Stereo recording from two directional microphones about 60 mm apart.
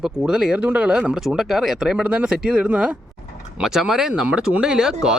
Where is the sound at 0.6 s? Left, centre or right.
Right.